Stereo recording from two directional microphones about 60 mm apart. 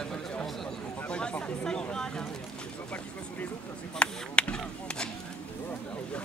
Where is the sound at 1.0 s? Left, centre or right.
Centre.